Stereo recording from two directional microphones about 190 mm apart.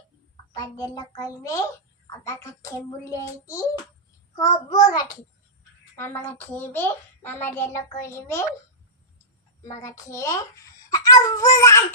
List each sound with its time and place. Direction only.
0.5 s a child's voice: 20° left (ahead or behind)
4.4 s a child's voice: 20° left (ahead or behind)
9.8 s a child's voice: 15° left (ahead or behind)